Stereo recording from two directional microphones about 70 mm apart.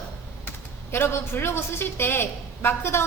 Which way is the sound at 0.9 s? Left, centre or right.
Left.